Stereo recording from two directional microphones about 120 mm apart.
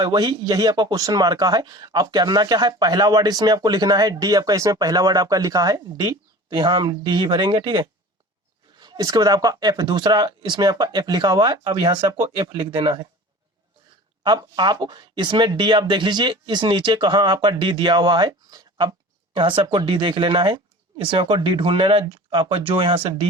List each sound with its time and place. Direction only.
0.0 s speech: 35° right (ahead or behind)
14.3 s speech: 35° right (ahead or behind)
19.4 s speech: 45° right (ahead or behind)